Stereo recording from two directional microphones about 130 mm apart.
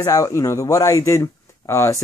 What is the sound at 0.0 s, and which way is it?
Speech, 25° left (ahead or behind).